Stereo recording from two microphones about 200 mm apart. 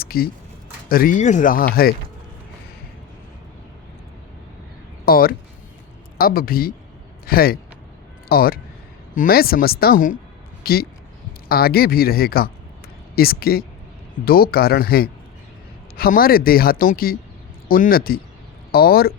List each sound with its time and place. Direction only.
0.0 s a sound: 50° left (ahead or behind)
0.9 s speech: 45° left (ahead or behind)
5.0 s speech: 45° left (ahead or behind)